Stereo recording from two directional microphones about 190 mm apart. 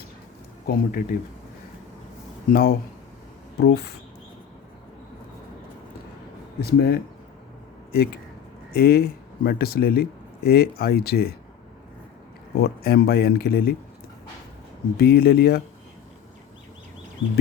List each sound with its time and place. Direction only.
0.7 s speech: 50° left (ahead or behind)
2.5 s speech: 50° left (ahead or behind)
6.6 s speech: 60° left (ahead or behind)
12.6 s speech: 55° left (ahead or behind)
14.9 s speech: 55° left (ahead or behind)